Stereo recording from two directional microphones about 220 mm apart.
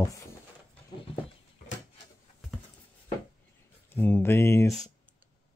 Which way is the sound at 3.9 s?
10° left (ahead or behind).